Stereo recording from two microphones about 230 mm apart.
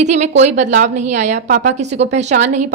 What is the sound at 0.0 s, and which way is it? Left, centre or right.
A woman's voice, right.